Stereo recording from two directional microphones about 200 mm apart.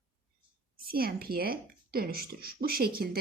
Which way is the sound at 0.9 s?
50° right (ahead or behind).